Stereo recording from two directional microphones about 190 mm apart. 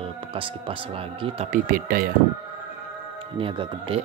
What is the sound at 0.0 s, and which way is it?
Speech, 30° right (ahead or behind).